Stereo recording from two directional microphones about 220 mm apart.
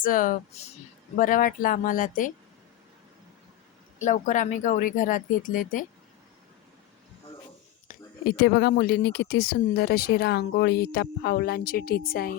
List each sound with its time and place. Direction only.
0.0 s speech: 40° left (ahead or behind)
4.0 s speech: 35° left (ahead or behind)
7.9 s speech: 45° left (ahead or behind)